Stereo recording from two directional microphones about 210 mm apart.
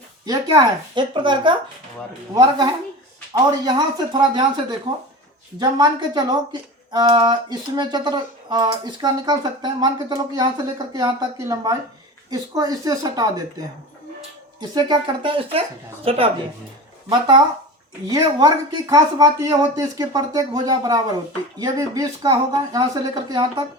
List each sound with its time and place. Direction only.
0.3 s speech: 20° right (ahead or behind)
5.5 s speech: 20° right (ahead or behind)
14.6 s speech: 20° right (ahead or behind)